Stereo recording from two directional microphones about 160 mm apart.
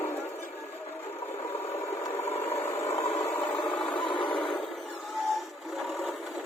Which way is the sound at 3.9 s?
30° left (ahead or behind).